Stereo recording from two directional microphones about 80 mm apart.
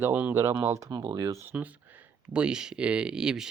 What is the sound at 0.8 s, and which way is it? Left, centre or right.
Speech, right.